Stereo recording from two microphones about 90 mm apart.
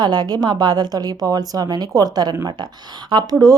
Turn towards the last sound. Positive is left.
turn(degrees=-45)  # may be behind; listen again after turning